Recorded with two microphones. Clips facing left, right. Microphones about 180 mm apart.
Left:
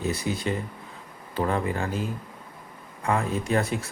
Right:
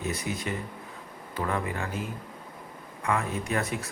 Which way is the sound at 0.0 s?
30° left (ahead or behind).